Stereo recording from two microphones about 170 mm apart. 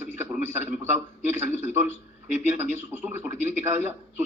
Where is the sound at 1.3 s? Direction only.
15° right (ahead or behind).